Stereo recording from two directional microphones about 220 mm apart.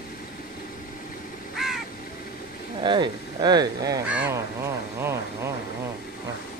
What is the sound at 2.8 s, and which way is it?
Speech, 20° right (ahead or behind).